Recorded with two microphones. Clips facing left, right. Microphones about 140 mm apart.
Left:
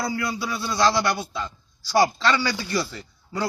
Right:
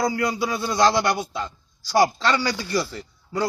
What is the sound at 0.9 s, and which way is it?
A man's voice, 20° right (ahead or behind).